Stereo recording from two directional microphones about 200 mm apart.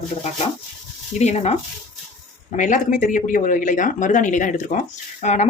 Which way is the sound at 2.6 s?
40° left (ahead or behind).